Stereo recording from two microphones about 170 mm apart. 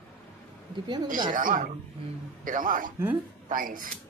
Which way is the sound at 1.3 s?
50° right (ahead or behind).